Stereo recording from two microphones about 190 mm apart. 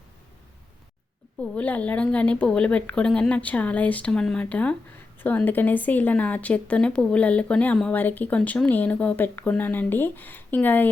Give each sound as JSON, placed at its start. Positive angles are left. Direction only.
{"t": 1.4, "sound": "a woman's voice", "side_deg": 5}